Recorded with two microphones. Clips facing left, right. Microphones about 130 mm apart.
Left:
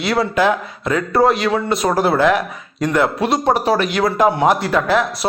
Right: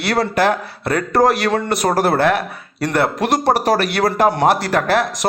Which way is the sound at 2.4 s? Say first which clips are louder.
Left 1 dB; 70° right (ahead or behind).